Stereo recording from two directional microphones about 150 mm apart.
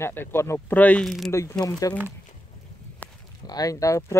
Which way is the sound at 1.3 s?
25° left (ahead or behind).